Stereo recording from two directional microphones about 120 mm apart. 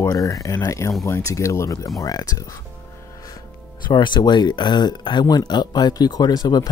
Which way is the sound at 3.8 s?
40° left (ahead or behind).